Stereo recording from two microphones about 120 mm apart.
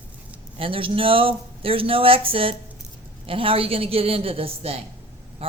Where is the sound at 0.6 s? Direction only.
50° right (ahead or behind).